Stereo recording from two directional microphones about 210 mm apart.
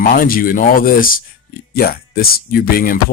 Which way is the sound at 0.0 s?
45° left (ahead or behind).